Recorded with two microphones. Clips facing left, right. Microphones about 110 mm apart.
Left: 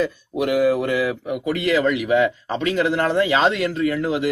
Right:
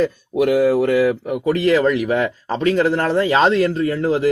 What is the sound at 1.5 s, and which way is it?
Speech, 35° right (ahead or behind).